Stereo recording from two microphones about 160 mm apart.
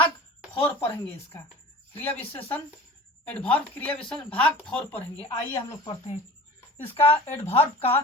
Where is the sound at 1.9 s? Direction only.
10° left (ahead or behind).